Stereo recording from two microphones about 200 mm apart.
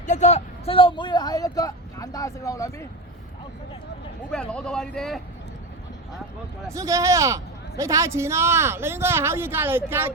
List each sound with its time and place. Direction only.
0.0 s a man's voice: 35° left (ahead or behind); by 2.8 s 15° left (ahead or behind)
4.3 s speech: 5° left (ahead or behind)
6.7 s a man's voice: 15° right (ahead or behind)